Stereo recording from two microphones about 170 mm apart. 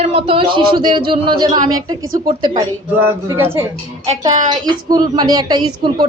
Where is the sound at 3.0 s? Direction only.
15° right (ahead or behind).